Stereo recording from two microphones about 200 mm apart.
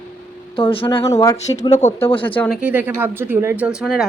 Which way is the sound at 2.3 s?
5° left (ahead or behind).